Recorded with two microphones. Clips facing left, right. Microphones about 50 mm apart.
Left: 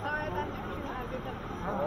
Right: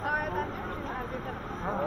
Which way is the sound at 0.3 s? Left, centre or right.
Right.